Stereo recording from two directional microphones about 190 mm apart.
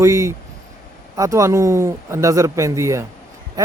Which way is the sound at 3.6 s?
20° right (ahead or behind).